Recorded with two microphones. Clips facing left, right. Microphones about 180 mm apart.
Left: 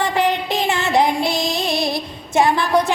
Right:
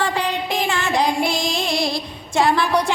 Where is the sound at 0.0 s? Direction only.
20° left (ahead or behind).